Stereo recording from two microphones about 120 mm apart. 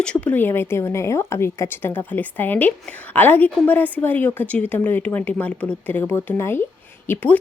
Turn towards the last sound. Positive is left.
turn(degrees=15)  # may be behind; listen again after turning